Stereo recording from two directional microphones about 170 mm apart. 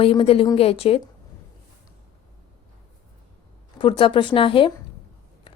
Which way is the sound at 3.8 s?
30° left (ahead or behind).